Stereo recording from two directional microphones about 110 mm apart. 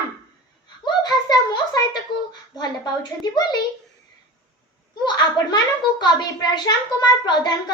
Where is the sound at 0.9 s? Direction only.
40° left (ahead or behind).